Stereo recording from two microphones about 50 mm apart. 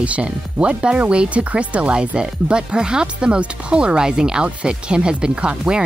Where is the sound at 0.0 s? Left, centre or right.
Right.